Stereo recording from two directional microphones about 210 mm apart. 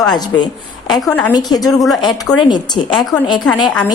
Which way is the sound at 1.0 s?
5° left (ahead or behind).